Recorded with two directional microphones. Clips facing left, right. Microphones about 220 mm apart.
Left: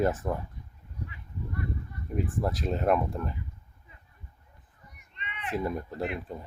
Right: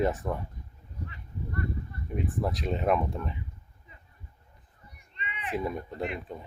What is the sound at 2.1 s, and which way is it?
Speech, centre (ahead or behind).